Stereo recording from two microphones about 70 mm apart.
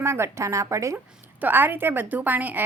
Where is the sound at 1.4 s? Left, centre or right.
Right.